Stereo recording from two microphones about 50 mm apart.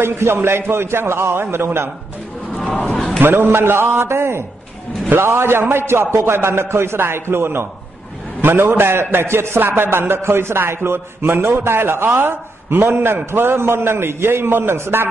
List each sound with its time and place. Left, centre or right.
0.0 s a man's voice: right
2.5 s a sound: left
3.2 s a man's voice: right
3.4 s a man's voice: right